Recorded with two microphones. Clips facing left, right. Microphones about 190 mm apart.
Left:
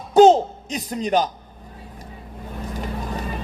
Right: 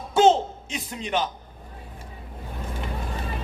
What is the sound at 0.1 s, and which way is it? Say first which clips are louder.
Music: left 6 dB; 40° left (ahead or behind).